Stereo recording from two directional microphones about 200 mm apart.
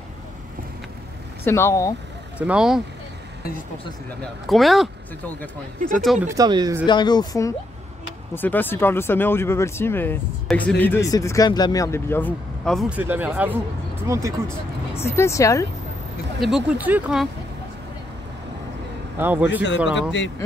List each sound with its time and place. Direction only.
1.4 s speech: 15° left (ahead or behind)
2.3 s speech: 5° right (ahead or behind)
4.2 s speech: centre (ahead or behind)
5.9 s speech: centre (ahead or behind)
6.2 s speech: 20° right (ahead or behind)
6.9 s speech: 20° left (ahead or behind); by 12.8 s 5° left (ahead or behind)
12.9 s speech: 5° right (ahead or behind)
15.0 s speech: 15° left (ahead or behind)
16.3 s speech: centre (ahead or behind)
19.1 s speech: 10° right (ahead or behind)